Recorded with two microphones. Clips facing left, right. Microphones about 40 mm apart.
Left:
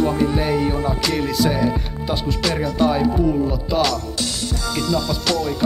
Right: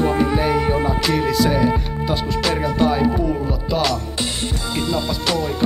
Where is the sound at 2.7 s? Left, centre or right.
Centre.